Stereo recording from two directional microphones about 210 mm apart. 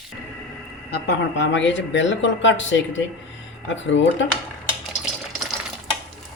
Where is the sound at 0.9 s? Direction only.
55° left (ahead or behind).